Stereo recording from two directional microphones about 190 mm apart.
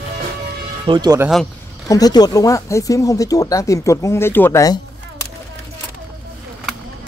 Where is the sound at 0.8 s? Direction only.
25° right (ahead or behind).